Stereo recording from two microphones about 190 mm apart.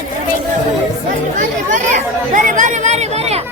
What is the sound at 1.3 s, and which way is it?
Speech, 40° right (ahead or behind).